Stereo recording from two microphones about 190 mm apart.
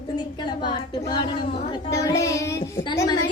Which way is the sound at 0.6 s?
25° left (ahead or behind).